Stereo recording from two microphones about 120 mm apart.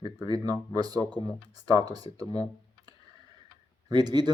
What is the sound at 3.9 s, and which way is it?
Speech, 35° right (ahead or behind).